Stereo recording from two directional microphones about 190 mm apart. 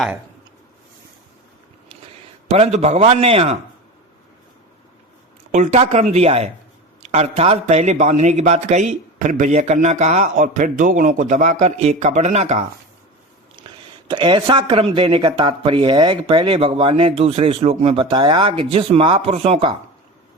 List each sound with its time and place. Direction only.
2.5 s a man's voice: 35° right (ahead or behind)
5.5 s a man's voice: 35° right (ahead or behind)
13.7 s speech: 25° right (ahead or behind)